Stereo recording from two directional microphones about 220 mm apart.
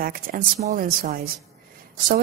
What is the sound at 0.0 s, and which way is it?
Speech, 40° right (ahead or behind).